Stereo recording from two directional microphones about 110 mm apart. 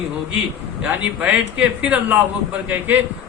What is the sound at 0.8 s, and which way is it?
A man's voice, 15° right (ahead or behind).